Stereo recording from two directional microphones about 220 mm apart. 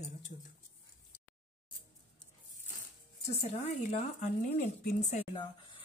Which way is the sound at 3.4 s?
30° left (ahead or behind).